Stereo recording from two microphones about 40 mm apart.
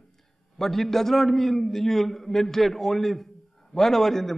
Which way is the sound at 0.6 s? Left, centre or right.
Centre.